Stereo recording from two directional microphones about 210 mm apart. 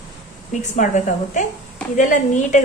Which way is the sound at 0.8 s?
35° left (ahead or behind).